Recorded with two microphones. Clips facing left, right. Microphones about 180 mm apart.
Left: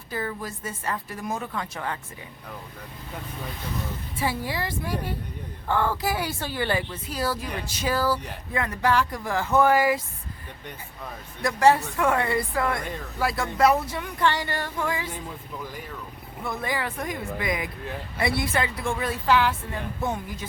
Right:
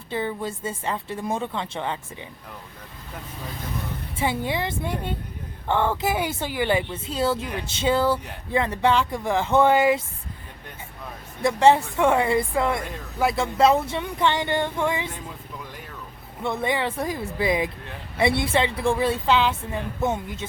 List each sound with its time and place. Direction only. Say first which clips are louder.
0.1 s speech: right 4 dB; 25° right (ahead or behind)
4.2 s speech: right 3 dB; 20° right (ahead or behind)
11.4 s speech: right 2 dB; 25° right (ahead or behind)
16.4 s speech: right 5 dB; 25° right (ahead or behind)